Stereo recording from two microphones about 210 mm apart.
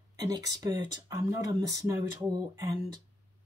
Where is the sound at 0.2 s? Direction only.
15° right (ahead or behind).